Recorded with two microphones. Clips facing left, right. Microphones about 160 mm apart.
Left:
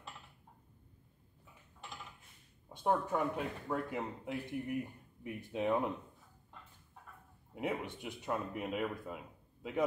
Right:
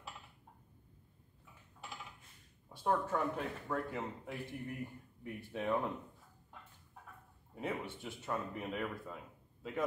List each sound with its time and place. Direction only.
2.7 s speech: 20° left (ahead or behind)
7.5 s a man's voice: 15° left (ahead or behind)